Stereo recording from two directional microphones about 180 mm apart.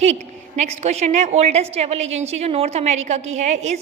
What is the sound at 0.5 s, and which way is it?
A woman's voice, 35° right (ahead or behind).